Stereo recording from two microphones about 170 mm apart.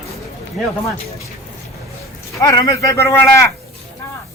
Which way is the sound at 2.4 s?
20° left (ahead or behind).